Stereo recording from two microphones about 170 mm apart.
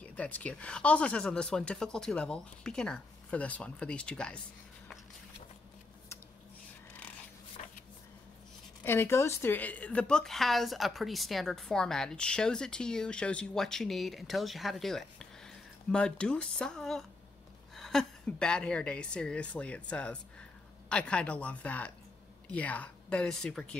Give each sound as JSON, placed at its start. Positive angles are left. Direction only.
{"t": 0.0, "sound": "a woman's voice", "side_deg": 10}
{"t": 7.6, "sound": "a sound", "side_deg": 45}
{"t": 8.8, "sound": "a woman's voice", "side_deg": 15}